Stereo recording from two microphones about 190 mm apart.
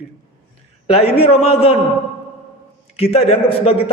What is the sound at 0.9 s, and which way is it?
Speech, 30° left (ahead or behind).